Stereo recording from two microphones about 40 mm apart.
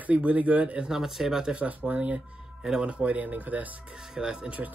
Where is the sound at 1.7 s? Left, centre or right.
Right.